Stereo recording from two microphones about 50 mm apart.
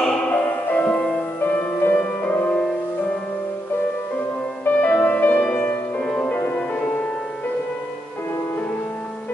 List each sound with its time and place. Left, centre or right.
0.3 s music: left
4.6 s music: left
5.9 s music: left